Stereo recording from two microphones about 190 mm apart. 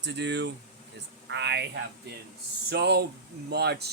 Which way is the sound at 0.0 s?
65° right (ahead or behind).